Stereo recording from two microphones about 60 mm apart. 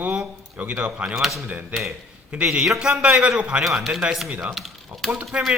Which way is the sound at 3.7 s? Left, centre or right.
Centre.